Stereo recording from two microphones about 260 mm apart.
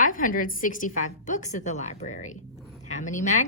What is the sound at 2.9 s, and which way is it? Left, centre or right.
Speech, left.